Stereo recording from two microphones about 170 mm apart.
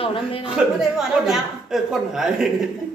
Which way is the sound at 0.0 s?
30° left (ahead or behind).